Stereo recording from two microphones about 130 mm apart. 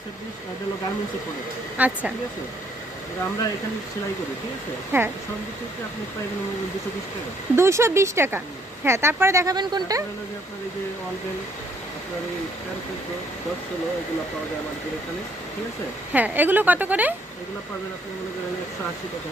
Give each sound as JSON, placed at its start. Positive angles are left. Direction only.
{"t": 1.8, "sound": "a woman's voice", "side_deg": -10}
{"t": 4.9, "sound": "a woman's voice", "side_deg": -15}
{"t": 7.5, "sound": "speech", "side_deg": -20}
{"t": 9.6, "sound": "speech", "side_deg": -35}
{"t": 16.1, "sound": "a woman's voice", "side_deg": -15}